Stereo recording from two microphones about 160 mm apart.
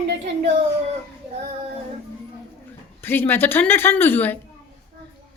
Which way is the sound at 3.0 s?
15° left (ahead or behind).